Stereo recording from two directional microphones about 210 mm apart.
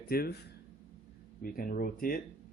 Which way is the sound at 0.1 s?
45° left (ahead or behind).